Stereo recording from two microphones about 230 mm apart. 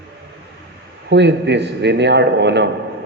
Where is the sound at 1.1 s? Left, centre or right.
Right.